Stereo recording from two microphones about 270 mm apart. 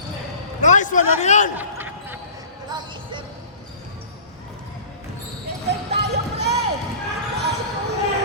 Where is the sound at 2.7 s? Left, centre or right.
Centre.